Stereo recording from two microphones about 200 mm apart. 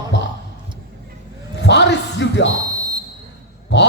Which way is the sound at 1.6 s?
60° left (ahead or behind).